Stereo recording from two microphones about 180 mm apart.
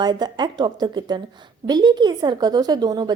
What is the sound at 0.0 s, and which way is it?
A woman's voice, 25° right (ahead or behind).